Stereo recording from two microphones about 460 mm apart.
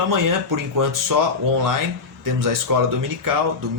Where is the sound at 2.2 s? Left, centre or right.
Right.